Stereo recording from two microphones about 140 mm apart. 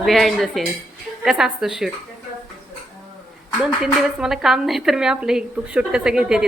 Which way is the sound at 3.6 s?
5° right (ahead or behind).